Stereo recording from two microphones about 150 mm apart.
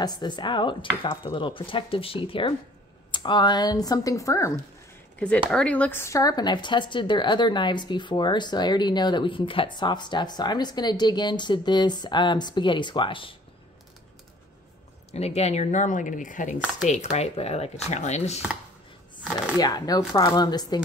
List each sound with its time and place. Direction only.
0.0 s speech: 30° left (ahead or behind)
5.5 s speech: 5° left (ahead or behind); by 13.4 s 35° left (ahead or behind)
15.0 s speech: 45° left (ahead or behind)
17.1 s speech: 45° left (ahead or behind)
19.6 s speech: 25° left (ahead or behind)